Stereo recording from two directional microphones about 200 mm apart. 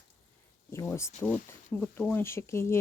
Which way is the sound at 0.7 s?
15° left (ahead or behind).